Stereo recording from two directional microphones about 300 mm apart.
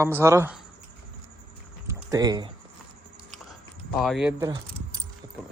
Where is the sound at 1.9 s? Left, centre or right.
Centre.